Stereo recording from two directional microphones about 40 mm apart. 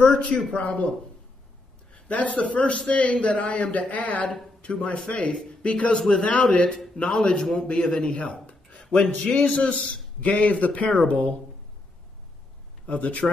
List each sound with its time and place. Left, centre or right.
0.3 s a man's voice: centre
1.9 s a man's voice: left
5.3 s a man's voice: left
6.3 s a man's voice: left
12.8 s speech: left